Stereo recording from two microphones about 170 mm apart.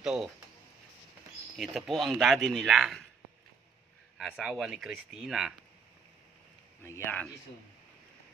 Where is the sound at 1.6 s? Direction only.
Centre (ahead or behind).